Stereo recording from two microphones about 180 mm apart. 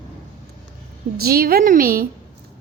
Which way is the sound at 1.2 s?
55° right (ahead or behind).